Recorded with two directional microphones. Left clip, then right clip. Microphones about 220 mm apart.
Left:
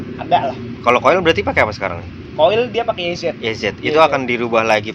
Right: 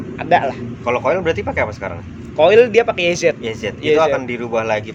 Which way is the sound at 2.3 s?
55° right (ahead or behind).